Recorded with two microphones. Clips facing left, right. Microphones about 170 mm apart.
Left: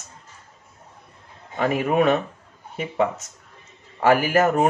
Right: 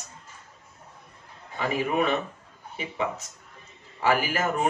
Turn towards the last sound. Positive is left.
turn(degrees=45)  # may be behind; listen again after turning